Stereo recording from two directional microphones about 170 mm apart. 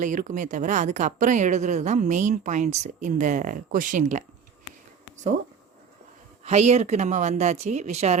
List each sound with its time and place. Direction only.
0.0 s speech: 50° right (ahead or behind)
6.4 s speech: 40° right (ahead or behind)